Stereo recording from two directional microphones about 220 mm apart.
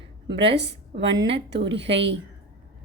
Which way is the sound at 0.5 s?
50° right (ahead or behind).